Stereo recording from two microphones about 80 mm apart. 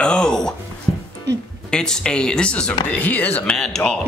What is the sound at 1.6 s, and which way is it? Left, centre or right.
Speech, centre.